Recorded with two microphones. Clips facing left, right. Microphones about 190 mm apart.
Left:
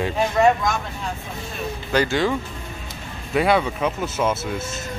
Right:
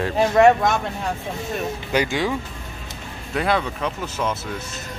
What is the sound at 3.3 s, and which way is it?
Speech, 5° left (ahead or behind).